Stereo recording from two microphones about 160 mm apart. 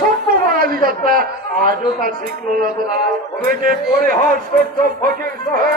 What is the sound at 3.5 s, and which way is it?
Speech, 60° right (ahead or behind).